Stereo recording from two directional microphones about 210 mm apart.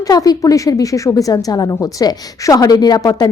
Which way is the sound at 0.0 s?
15° left (ahead or behind).